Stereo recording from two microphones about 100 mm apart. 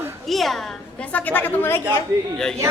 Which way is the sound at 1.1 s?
15° left (ahead or behind).